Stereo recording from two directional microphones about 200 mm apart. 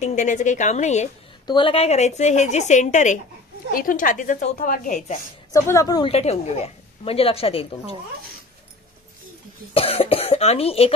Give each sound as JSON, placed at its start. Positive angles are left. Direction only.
{"t": 0.0, "sound": "a woman's voice", "side_deg": 35}
{"t": 5.5, "sound": "a woman's voice", "side_deg": 15}
{"t": 9.8, "sound": "a woman's voice", "side_deg": 30}